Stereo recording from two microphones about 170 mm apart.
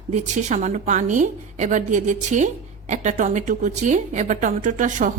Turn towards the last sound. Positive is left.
turn(degrees=-50)  # may be behind; listen again after turning